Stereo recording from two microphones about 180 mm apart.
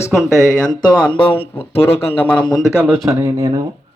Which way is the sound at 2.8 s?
15° right (ahead or behind).